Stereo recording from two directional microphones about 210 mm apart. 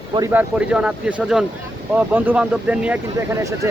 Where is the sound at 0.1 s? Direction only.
15° right (ahead or behind).